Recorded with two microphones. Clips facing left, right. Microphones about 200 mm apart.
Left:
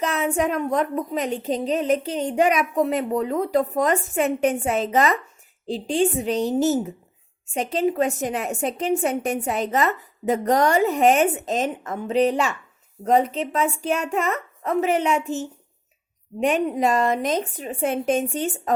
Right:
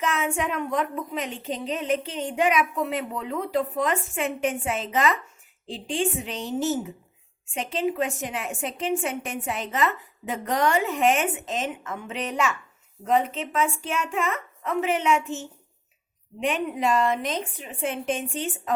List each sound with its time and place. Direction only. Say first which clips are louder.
0.0 s a woman's voice: left 4 dB; 35° left (ahead or behind)